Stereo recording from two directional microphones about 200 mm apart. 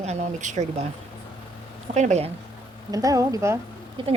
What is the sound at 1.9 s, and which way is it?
Speech, 35° right (ahead or behind).